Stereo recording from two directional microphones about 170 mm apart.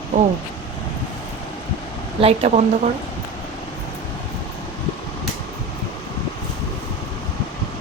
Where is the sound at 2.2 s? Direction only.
35° right (ahead or behind).